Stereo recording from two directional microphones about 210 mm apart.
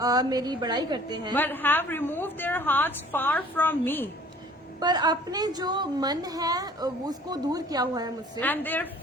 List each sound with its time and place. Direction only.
0.0 s a woman's voice: 20° right (ahead or behind)
1.3 s a woman's voice: 10° left (ahead or behind)
4.8 s a woman's voice: 20° right (ahead or behind)
8.4 s a woman's voice: 10° left (ahead or behind)